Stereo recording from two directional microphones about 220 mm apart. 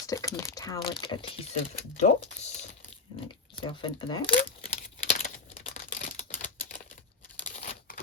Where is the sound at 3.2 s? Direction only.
25° left (ahead or behind).